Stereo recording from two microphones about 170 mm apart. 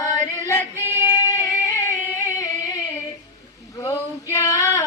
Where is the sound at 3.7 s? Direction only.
20° left (ahead or behind).